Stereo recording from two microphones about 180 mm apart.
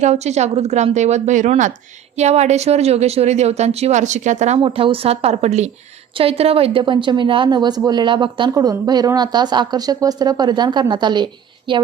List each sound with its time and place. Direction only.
0.0 s a woman's voice: 40° right (ahead or behind)